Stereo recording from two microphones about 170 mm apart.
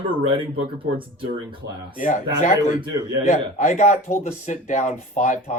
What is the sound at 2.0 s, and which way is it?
Speech, 50° left (ahead or behind).